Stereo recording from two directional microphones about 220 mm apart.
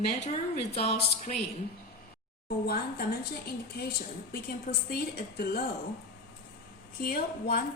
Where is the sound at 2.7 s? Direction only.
45° left (ahead or behind).